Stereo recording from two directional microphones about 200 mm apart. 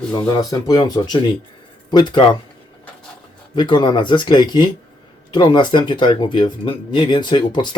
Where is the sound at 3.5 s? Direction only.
25° left (ahead or behind).